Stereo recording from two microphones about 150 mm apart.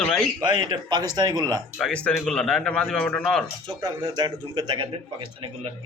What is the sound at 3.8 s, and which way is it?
Speech, 30° right (ahead or behind).